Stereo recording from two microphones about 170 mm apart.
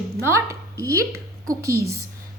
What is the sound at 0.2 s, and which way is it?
A woman's voice, 15° right (ahead or behind).